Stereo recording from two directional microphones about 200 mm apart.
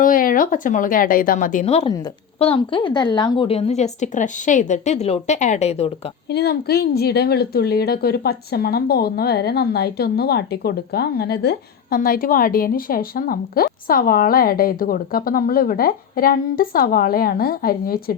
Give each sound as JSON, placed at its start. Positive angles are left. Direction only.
{"t": 0.0, "sound": "a woman's voice", "side_deg": 45}
{"t": 6.3, "sound": "a woman's voice", "side_deg": 55}